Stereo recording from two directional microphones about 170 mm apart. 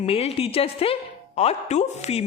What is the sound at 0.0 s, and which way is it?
A woman's voice, 35° left (ahead or behind).